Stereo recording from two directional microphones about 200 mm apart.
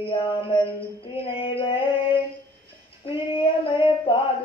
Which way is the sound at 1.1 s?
30° left (ahead or behind).